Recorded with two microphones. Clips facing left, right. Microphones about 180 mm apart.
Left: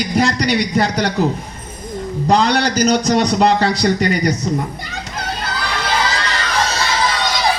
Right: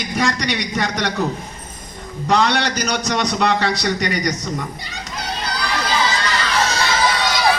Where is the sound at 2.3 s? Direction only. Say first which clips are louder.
Left 3 dB; 35° left (ahead or behind).